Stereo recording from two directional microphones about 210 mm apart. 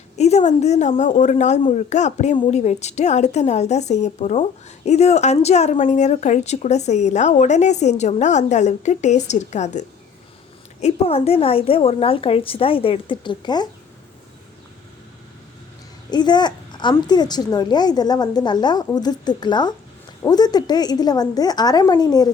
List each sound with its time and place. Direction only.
0.2 s a woman's voice: 30° left (ahead or behind)
16.0 s a woman's voice: 20° left (ahead or behind)